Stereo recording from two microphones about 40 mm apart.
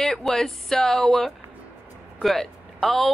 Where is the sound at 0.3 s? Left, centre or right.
Centre.